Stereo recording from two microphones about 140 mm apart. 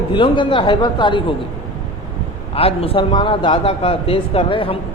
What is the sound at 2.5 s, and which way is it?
A man's voice, 45° left (ahead or behind).